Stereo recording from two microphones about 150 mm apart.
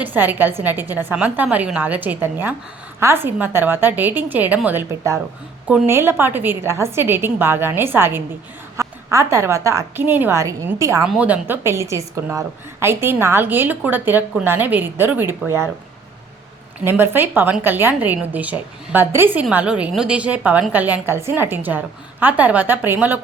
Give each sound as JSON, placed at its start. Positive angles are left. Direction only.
{"t": 0.0, "sound": "a woman's voice", "side_deg": -10}
{"t": 11.0, "sound": "a woman's voice", "side_deg": -5}
{"t": 16.8, "sound": "a woman's voice", "side_deg": -15}